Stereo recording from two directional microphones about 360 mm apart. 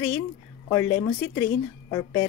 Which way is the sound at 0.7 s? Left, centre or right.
Centre.